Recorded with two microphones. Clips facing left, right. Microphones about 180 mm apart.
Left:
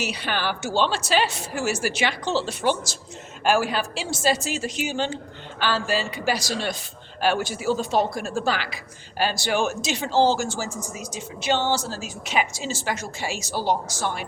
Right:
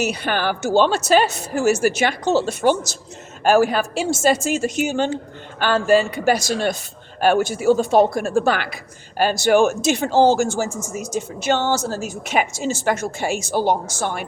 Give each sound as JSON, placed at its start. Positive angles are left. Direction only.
{"t": 0.0, "sound": "speech", "side_deg": -50}